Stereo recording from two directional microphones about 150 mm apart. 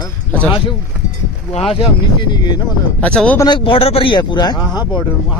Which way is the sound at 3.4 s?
35° left (ahead or behind).